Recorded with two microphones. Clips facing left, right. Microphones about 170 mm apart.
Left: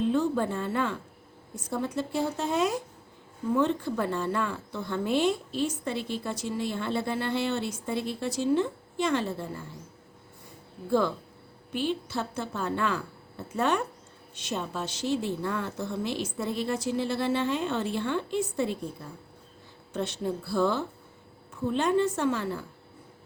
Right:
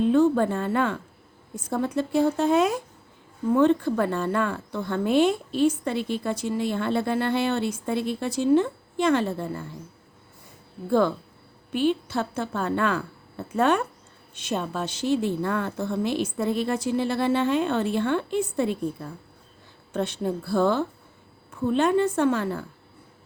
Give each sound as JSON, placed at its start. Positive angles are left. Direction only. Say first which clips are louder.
{"t": 0.1, "sound": "a woman's voice", "louder": "right 6 dB", "side_deg": -55}
{"t": 11.7, "sound": "a woman's voice", "louder": "right 6 dB", "side_deg": -60}
{"t": 19.9, "sound": "a woman's voice", "louder": "right 4 dB", "side_deg": -55}